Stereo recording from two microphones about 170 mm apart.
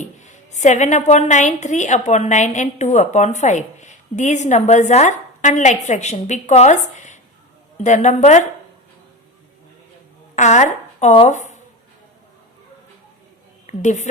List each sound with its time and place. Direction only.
0.0 s a woman's voice: 45° left (ahead or behind)
10.3 s a woman's voice: 45° left (ahead or behind)
13.7 s a woman's voice: 45° left (ahead or behind)